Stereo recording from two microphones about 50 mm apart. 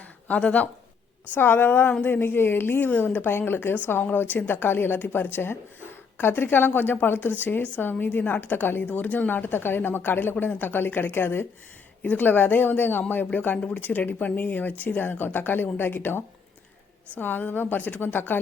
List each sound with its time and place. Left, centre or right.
0.3 s speech: left
1.4 s a woman's voice: left